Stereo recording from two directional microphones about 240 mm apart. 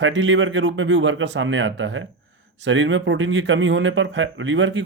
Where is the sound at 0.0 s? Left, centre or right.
Right.